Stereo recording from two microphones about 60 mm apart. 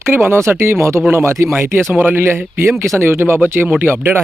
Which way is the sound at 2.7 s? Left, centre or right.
Right.